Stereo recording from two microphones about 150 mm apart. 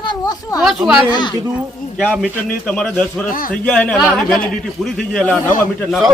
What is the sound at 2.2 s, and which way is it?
A woman's voice, 5° left (ahead or behind).